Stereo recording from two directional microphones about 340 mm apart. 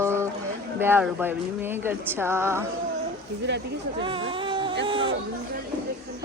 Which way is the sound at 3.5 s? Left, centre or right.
Right.